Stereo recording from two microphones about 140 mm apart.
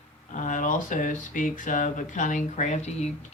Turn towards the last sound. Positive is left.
turn(degrees=50)  # may be behind; listen again after turning